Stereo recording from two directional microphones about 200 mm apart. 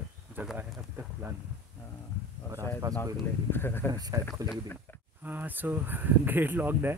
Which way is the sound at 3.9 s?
20° right (ahead or behind).